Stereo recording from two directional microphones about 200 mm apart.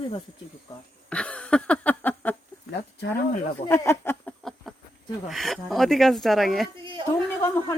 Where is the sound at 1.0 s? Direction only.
5° left (ahead or behind).